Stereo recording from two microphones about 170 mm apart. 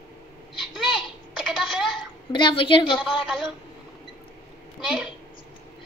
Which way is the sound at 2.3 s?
30° left (ahead or behind).